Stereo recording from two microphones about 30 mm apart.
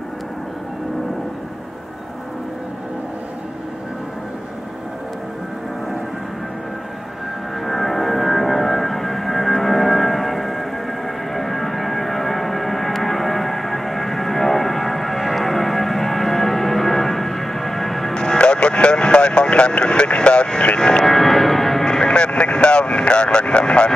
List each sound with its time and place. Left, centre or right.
7.6 s music: centre
18.1 s vehicle: left
20.7 s music: left
21.0 s a sound: centre
21.8 s vehicle: left